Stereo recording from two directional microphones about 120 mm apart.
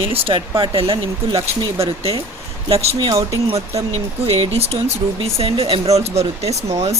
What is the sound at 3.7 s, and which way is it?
Speech, 60° right (ahead or behind).